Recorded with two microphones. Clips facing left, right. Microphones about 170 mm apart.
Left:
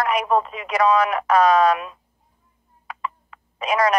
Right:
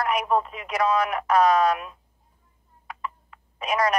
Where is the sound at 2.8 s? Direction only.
90° left.